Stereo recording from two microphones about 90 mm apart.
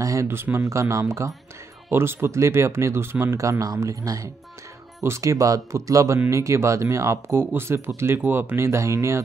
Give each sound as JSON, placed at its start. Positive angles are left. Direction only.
{"t": 0.0, "sound": "speech", "side_deg": -35}